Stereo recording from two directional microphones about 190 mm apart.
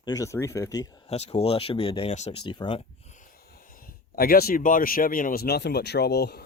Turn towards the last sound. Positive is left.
turn(degrees=60)  # may be behind; listen again after turning